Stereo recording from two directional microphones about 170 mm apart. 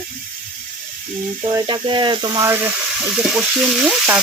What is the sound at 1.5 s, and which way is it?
Speech, 20° right (ahead or behind).